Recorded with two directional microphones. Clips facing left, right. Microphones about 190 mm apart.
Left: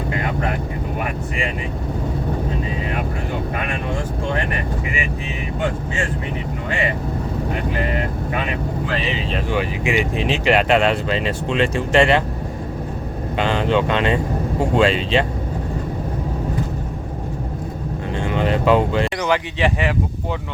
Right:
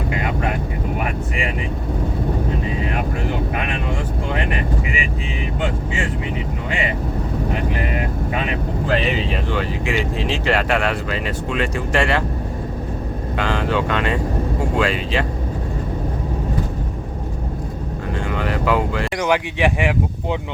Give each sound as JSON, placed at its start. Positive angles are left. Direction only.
{"t": 9.5, "sound": "speech", "side_deg": 15}
{"t": 13.3, "sound": "speech", "side_deg": 20}
{"t": 18.3, "sound": "speech", "side_deg": 25}
{"t": 19.2, "sound": "speech", "side_deg": -15}